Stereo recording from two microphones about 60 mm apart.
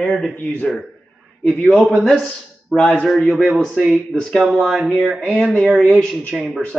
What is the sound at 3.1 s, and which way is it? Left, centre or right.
Speech, centre.